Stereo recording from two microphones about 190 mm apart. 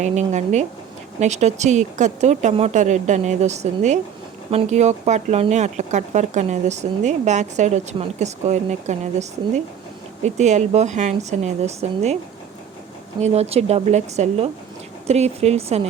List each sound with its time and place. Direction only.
0.0 s speech: 35° right (ahead or behind)
10.2 s speech: 40° right (ahead or behind)
13.2 s speech: 35° right (ahead or behind)